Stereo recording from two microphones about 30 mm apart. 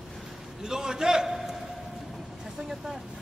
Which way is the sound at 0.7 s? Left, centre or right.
Right.